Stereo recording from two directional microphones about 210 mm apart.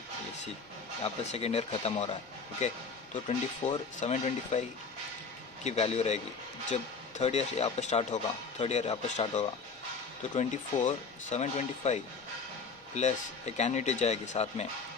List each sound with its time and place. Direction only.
1.0 s speech: 30° left (ahead or behind)
5.6 s speech: 30° left (ahead or behind)
7.2 s speech: 30° left (ahead or behind)